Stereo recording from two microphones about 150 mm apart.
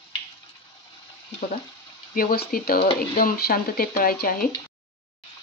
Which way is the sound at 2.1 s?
75° left (ahead or behind).